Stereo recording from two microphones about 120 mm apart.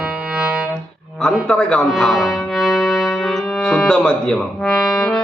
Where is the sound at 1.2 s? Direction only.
5° left (ahead or behind).